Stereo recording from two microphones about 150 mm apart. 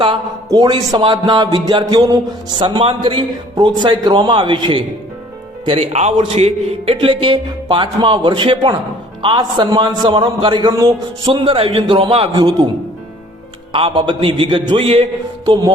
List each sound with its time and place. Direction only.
0.5 s a man's voice: 25° right (ahead or behind)
11.2 s a man's voice: 35° right (ahead or behind)
13.7 s a man's voice: 35° right (ahead or behind)